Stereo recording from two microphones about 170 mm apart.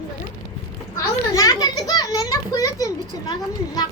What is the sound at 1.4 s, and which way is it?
A child's voice, 20° left (ahead or behind).